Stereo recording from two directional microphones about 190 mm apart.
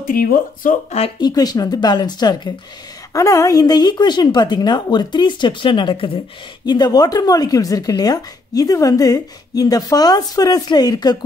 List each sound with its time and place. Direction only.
0.0 s speech: 50° left (ahead or behind)
0.9 s speech: 30° left (ahead or behind)
1.3 s speech: 20° left (ahead or behind)